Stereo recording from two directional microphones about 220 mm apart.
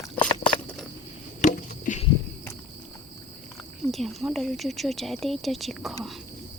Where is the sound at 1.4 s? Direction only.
35° left (ahead or behind).